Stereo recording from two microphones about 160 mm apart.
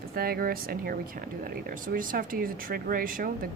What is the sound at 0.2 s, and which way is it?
Speech, 70° right (ahead or behind).